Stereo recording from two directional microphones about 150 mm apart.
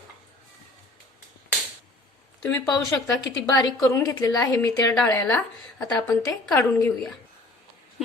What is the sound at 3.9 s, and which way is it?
A woman's voice, 20° left (ahead or behind).